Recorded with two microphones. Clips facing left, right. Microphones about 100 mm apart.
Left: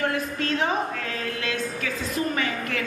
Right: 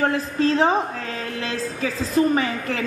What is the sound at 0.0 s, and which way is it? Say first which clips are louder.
A woman's voice: right 6 dB; 30° right (ahead or behind).